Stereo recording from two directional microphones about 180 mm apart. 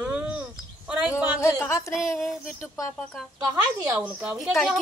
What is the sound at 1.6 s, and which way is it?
Speech, 15° left (ahead or behind).